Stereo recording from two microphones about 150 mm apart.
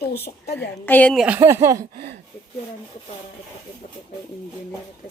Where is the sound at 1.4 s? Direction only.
20° right (ahead or behind).